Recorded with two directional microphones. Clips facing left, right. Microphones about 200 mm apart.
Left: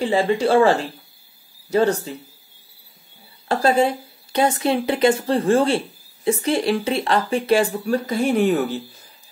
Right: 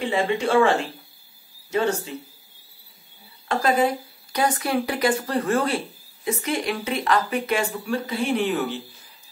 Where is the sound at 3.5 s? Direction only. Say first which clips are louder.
Left 3 dB; 30° left (ahead or behind).